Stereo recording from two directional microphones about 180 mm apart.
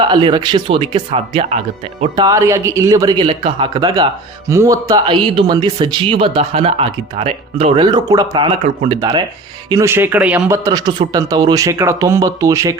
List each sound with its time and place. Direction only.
0.0 s speech: 30° right (ahead or behind)
2.1 s speech: 20° right (ahead or behind)
4.4 s a man's voice: 15° right (ahead or behind)